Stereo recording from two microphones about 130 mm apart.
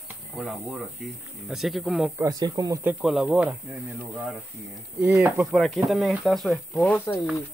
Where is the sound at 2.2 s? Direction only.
30° right (ahead or behind).